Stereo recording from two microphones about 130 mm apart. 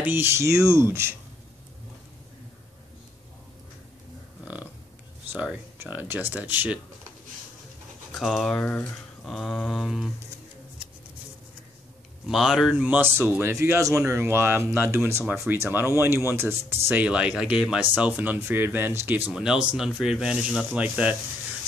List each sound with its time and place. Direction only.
0.0 s speech: 15° right (ahead or behind)
5.3 s speech: 15° right (ahead or behind)
8.1 s speech: centre (ahead or behind)
12.3 s speech: centre (ahead or behind)